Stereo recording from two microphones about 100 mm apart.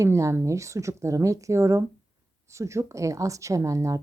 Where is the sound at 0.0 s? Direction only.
30° right (ahead or behind).